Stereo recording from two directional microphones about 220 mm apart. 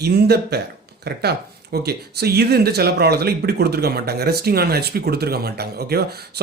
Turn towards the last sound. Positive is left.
turn(degrees=-45)  # may be behind; listen again after turning